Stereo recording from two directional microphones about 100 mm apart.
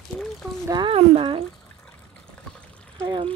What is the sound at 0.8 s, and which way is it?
Speech, 70° right (ahead or behind).